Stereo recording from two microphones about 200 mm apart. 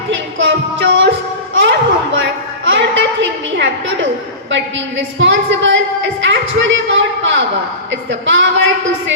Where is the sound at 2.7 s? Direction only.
65° right (ahead or behind).